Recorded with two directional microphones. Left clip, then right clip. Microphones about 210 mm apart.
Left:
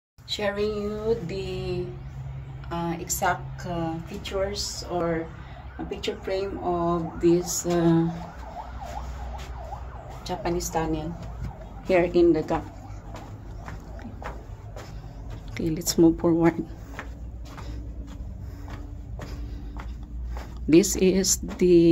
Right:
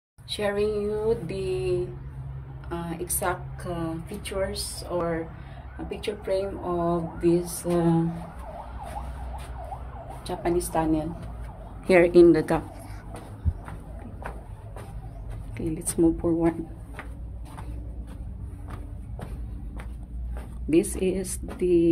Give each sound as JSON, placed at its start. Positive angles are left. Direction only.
{"t": 0.3, "sound": "a woman's voice", "side_deg": -10}
{"t": 2.7, "sound": "a woman's voice", "side_deg": -10}
{"t": 10.2, "sound": "a woman's voice", "side_deg": -25}
{"t": 15.5, "sound": "speech", "side_deg": 20}
{"t": 20.7, "sound": "a woman's voice", "side_deg": 25}